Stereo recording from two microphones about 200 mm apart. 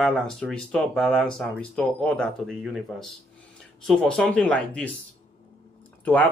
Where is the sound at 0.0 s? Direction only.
Centre (ahead or behind).